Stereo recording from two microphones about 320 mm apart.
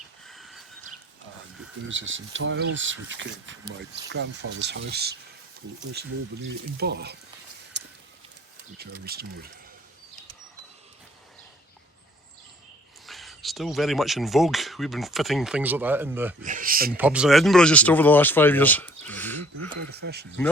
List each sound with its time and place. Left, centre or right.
0.3 s a sound: centre
1.9 s speech: right
7.7 s a sound: right
8.8 s speech: right
13.1 s speech: centre
16.4 s speech: right
16.9 s speech: centre
19.7 s speech: right